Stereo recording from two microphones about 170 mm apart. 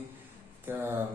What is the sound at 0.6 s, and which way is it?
Speech, 15° right (ahead or behind).